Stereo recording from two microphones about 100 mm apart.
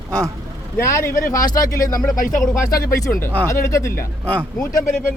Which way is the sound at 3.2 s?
20° left (ahead or behind).